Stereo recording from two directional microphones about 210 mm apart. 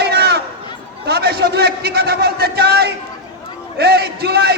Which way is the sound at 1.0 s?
50° right (ahead or behind).